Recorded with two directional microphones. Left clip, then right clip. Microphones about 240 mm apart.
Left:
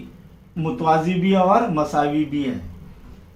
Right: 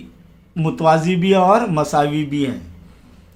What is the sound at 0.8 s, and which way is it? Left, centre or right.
Speech, right.